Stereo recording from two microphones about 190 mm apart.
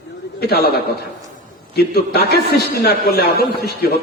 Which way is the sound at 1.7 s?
55° left (ahead or behind).